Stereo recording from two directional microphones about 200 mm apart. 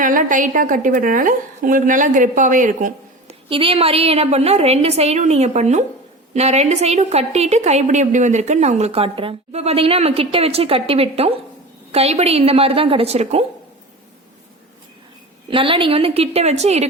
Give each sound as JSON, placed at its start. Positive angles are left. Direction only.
{"t": 0.0, "sound": "a woman's voice", "side_deg": -40}
{"t": 3.5, "sound": "a woman's voice", "side_deg": -25}
{"t": 15.4, "sound": "a woman's voice", "side_deg": -25}